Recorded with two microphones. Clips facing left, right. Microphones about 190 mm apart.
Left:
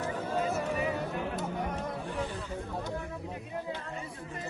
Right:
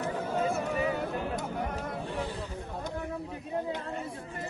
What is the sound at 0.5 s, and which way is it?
Music, centre (ahead or behind).